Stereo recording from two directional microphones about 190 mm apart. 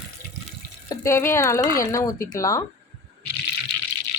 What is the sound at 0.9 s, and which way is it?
A woman's voice, 15° left (ahead or behind).